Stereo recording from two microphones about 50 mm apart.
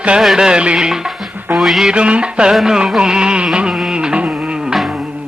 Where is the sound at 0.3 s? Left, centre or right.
Centre.